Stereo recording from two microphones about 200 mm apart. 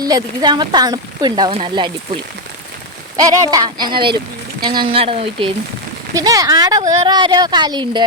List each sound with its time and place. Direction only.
0.0 s speech: 20° right (ahead or behind)
3.2 s speech: 20° right (ahead or behind)